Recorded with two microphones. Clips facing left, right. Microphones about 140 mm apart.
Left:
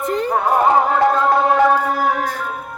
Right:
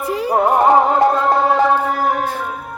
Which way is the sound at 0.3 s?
25° right (ahead or behind).